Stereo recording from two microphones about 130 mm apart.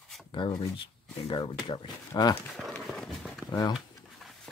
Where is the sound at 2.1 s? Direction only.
20° left (ahead or behind).